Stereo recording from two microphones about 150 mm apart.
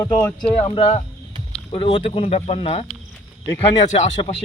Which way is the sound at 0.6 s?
40° left (ahead or behind).